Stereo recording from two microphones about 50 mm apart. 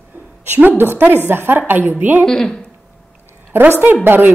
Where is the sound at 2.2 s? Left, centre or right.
Centre.